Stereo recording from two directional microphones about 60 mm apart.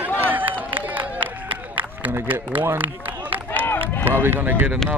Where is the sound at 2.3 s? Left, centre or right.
Right.